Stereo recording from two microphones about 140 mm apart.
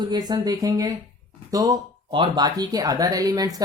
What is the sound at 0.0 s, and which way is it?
Speech, 30° right (ahead or behind).